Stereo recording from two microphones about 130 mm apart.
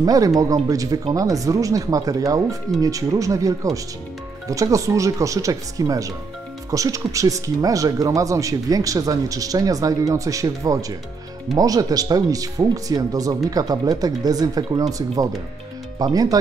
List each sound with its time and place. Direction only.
0.0 s speech: 30° right (ahead or behind)